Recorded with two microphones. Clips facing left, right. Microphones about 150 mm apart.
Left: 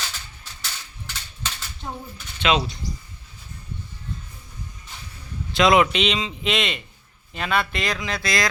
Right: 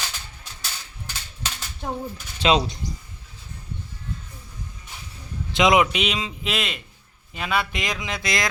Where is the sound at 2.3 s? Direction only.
35° right (ahead or behind).